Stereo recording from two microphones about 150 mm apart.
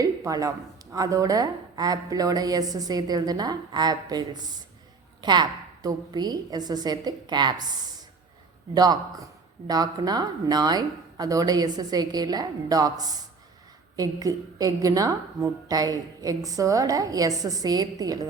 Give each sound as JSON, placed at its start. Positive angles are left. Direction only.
{"t": 0.0, "sound": "a sound", "side_deg": -25}
{"t": 0.9, "sound": "a woman's voice", "side_deg": -20}
{"t": 8.7, "sound": "a woman's voice", "side_deg": -25}